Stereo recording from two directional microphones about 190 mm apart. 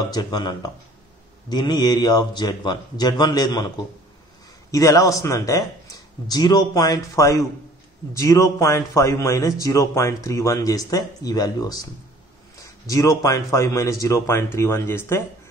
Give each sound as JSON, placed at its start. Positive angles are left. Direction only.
{"t": 0.1, "sound": "speech", "side_deg": 20}
{"t": 12.8, "sound": "speech", "side_deg": 15}